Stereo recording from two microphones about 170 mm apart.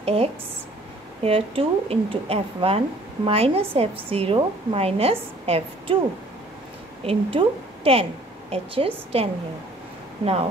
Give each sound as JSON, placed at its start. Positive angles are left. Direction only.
{"t": 0.0, "sound": "a woman's voice", "side_deg": -35}
{"t": 7.1, "sound": "a woman's voice", "side_deg": -35}